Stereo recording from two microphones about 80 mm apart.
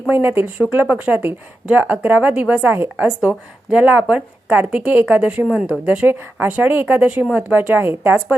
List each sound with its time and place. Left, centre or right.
0.1 s speech: right
3.2 s a woman's voice: centre
5.5 s a woman's voice: centre
6.1 s speech: right